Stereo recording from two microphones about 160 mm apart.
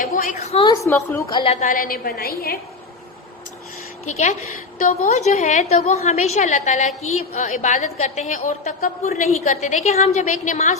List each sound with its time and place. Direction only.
0.0 s a woman's voice: 55° left (ahead or behind)
0.5 s a woman's voice: 25° left (ahead or behind)
1.3 s a woman's voice: 30° left (ahead or behind)
1.6 s a woman's voice: 60° left (ahead or behind)
4.2 s a woman's voice: 45° left (ahead or behind)